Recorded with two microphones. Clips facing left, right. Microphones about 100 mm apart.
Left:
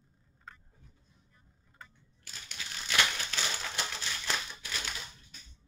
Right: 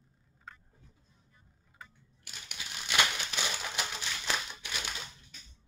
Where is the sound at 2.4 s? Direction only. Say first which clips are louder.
Even; 15° right (ahead or behind).